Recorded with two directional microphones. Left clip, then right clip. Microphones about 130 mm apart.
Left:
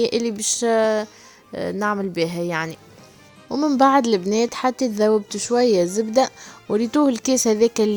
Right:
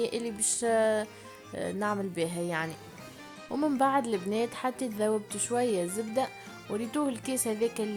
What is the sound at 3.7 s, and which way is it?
A woman's voice, 60° left (ahead or behind).